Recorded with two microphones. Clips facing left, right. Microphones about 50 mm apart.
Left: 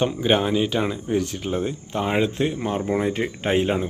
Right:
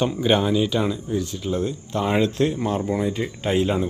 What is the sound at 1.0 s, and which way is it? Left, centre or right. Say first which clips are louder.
Speech: left 2 dB; left.